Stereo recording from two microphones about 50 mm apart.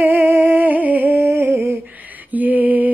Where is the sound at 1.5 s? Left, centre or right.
Right.